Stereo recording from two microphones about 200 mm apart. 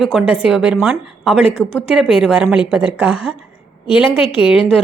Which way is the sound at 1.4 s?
30° left (ahead or behind).